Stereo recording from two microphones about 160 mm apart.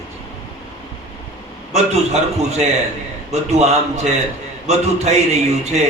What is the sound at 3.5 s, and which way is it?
A man's voice, 40° right (ahead or behind).